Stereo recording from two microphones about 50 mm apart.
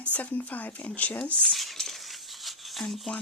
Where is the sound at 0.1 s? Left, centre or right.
Left.